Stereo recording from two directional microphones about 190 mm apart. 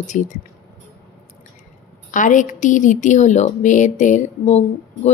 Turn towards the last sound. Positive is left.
turn(degrees=40)  # may be behind; listen again after turning